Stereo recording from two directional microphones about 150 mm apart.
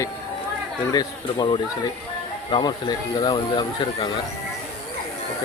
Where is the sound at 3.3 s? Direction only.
40° left (ahead or behind).